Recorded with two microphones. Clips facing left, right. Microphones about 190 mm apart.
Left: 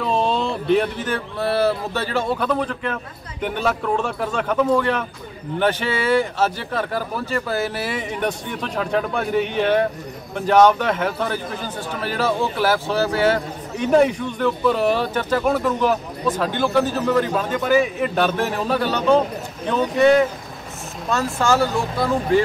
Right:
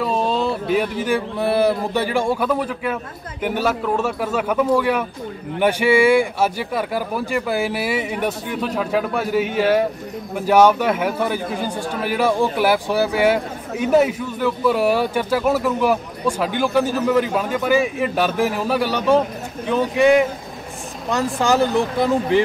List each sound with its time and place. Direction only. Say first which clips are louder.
0.0 s a man's voice: right 1 dB; 5° right (ahead or behind)